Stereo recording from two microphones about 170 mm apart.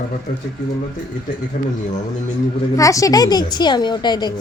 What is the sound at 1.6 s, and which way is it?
Speech, 45° left (ahead or behind).